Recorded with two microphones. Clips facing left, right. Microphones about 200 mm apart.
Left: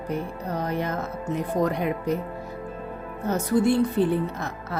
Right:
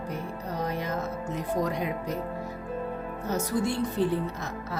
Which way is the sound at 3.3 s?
60° left (ahead or behind).